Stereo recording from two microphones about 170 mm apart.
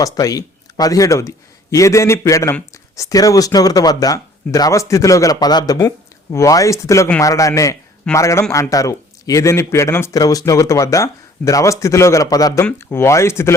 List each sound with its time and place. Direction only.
0.0 s speech: 20° left (ahead or behind)